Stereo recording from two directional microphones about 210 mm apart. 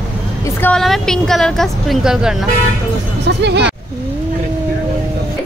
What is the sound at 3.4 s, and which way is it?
Speech, 55° right (ahead or behind).